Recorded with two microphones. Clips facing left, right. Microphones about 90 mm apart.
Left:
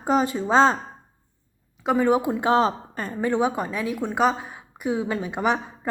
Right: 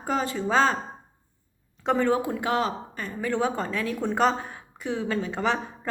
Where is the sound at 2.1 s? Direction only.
20° left (ahead or behind); by 3.2 s 35° left (ahead or behind).